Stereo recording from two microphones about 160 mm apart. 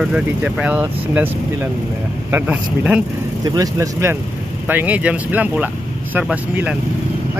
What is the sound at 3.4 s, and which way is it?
Speech, 20° right (ahead or behind).